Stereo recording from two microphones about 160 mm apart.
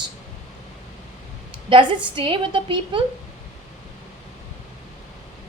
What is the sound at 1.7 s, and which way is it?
A woman's voice, 35° right (ahead or behind).